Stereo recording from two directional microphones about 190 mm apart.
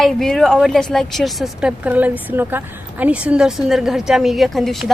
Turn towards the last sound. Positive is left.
turn(degrees=0)  # may be behind; listen again after turning